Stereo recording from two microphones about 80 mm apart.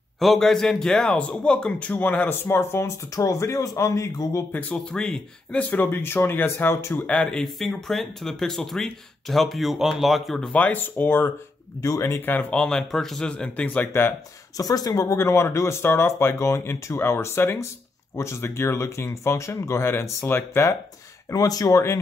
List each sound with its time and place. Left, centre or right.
0.2 s a man's voice: centre; by 4.5 s left
4.5 s speech: centre
4.7 s a man's voice: centre
5.6 s speech: left
7.0 s speech: centre
10.5 s speech: centre
11.8 s speech: left
12.2 s a man's voice: left
14.6 s speech: left
15.1 s speech: left
21.3 s speech: left